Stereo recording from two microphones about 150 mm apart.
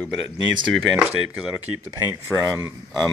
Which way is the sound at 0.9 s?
10° right (ahead or behind).